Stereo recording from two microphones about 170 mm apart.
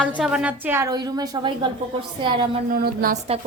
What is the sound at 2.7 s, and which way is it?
Speech, 60° right (ahead or behind).